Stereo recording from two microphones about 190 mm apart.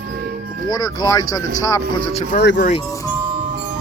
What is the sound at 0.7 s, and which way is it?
Speech, 20° left (ahead or behind).